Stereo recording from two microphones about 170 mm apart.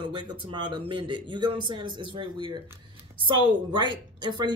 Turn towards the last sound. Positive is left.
turn(degrees=-25)  # may be behind; listen again after turning